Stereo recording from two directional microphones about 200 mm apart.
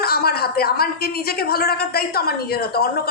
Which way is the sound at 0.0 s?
50° left (ahead or behind).